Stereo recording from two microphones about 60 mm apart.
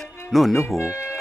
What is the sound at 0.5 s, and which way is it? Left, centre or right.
Speech, left.